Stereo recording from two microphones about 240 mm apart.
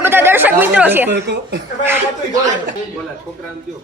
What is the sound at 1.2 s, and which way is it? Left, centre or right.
Speech, right.